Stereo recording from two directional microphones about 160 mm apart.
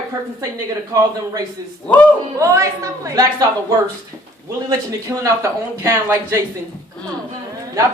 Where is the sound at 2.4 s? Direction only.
20° right (ahead or behind).